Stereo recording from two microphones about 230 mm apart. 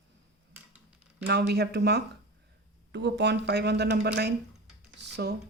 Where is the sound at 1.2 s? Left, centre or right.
Right.